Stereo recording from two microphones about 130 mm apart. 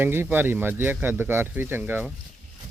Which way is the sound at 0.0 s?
15° right (ahead or behind).